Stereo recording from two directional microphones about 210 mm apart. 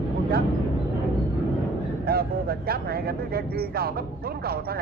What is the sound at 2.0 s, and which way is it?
Speech, 45° right (ahead or behind).